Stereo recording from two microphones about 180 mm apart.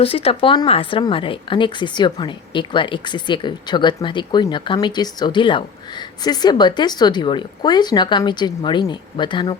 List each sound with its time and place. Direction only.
0.0 s a woman's voice: 30° left (ahead or behind)